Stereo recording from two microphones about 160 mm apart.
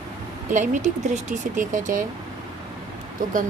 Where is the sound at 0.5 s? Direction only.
50° right (ahead or behind).